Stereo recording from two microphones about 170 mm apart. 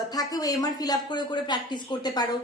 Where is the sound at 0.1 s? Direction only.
20° left (ahead or behind).